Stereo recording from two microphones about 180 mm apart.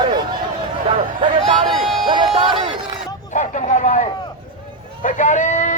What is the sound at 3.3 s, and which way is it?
Vehicle, 45° left (ahead or behind).